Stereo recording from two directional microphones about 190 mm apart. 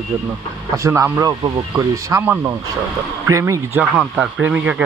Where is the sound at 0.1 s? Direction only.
10° right (ahead or behind).